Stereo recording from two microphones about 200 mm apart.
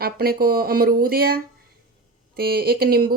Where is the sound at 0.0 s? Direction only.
50° right (ahead or behind).